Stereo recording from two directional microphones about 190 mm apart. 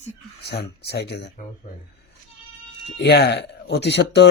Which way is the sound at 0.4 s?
60° left (ahead or behind).